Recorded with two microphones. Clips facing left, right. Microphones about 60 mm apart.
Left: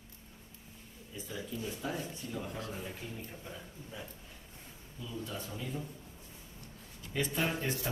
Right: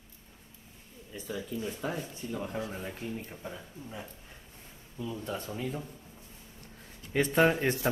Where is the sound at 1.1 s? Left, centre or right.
Right.